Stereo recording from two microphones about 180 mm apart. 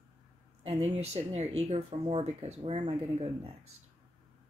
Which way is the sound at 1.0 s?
35° right (ahead or behind).